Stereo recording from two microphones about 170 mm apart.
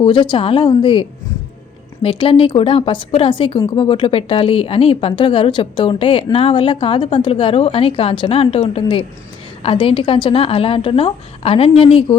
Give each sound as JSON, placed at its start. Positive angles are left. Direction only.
{"t": 0.0, "sound": "a woman's voice", "side_deg": 30}